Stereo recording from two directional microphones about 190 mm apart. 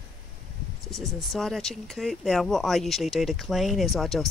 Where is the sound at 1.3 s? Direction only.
Centre (ahead or behind).